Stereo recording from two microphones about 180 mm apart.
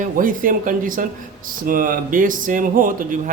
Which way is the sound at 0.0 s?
50° right (ahead or behind).